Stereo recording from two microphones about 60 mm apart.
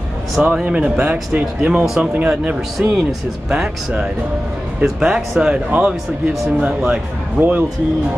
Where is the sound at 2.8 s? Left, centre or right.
Centre.